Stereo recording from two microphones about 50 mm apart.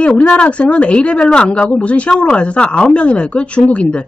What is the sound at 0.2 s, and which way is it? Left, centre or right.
Speech, left.